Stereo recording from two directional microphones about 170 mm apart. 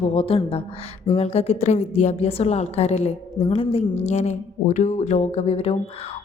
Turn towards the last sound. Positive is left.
turn(degrees=35)  # may be behind; listen again after turning